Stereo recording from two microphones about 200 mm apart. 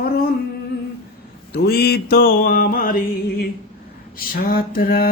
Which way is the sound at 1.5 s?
50° left (ahead or behind).